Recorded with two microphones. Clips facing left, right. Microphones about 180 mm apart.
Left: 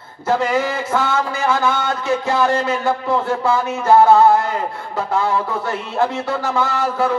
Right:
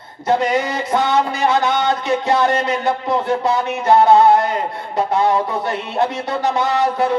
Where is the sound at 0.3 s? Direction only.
20° right (ahead or behind).